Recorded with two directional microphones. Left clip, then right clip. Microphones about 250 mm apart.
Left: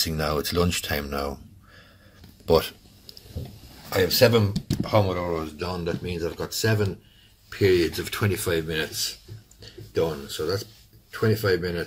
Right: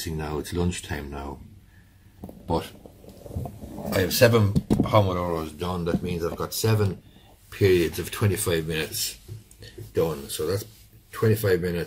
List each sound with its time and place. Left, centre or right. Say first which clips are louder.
0.0 s speech: left 6 dB; left
2.4 s speech: left 7 dB; left
3.9 s speech: left 1 dB; centre